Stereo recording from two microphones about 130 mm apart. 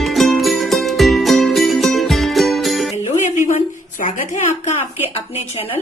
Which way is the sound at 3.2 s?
75° left (ahead or behind).